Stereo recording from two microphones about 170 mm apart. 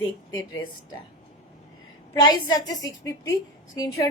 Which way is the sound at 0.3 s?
25° left (ahead or behind).